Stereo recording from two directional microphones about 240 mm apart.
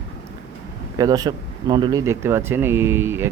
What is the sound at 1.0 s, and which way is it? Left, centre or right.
Speech, centre.